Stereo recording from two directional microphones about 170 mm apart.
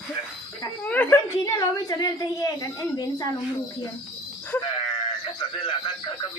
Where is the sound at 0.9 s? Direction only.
10° left (ahead or behind).